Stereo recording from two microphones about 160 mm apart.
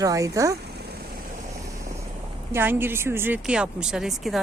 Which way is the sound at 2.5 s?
15° right (ahead or behind).